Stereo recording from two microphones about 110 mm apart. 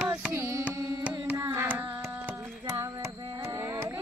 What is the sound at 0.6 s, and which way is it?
Carnatic music, 10° right (ahead or behind).